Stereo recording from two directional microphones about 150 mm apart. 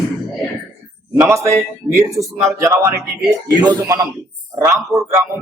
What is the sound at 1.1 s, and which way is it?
A woman's voice, 20° right (ahead or behind).